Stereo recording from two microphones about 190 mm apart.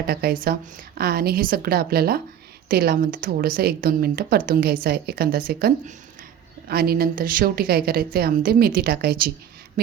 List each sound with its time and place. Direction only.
0.1 s a woman's voice: 55° right (ahead or behind)